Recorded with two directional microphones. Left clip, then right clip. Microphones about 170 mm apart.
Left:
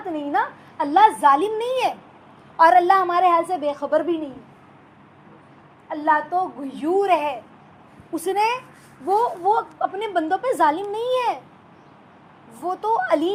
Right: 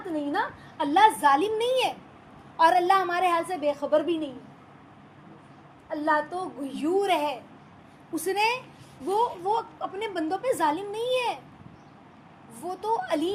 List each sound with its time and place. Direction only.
0.3 s a woman's voice: 15° left (ahead or behind)
5.9 s a child's voice: 20° left (ahead or behind)
12.5 s a woman's voice: 15° left (ahead or behind)